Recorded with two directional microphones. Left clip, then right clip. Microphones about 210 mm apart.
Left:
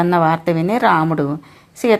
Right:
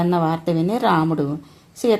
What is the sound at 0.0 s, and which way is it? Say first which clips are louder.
A woman's voice: left 6 dB; 20° left (ahead or behind).